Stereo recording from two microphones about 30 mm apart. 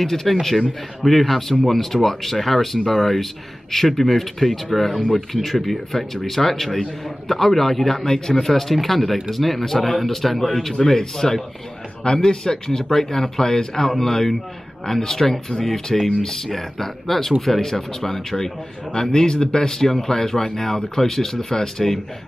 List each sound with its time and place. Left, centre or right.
0.0 s speech: centre
11.0 s speech: left
18.9 s speech: left